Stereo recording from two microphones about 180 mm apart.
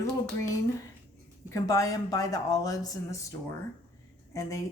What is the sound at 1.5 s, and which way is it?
Speech, 20° left (ahead or behind).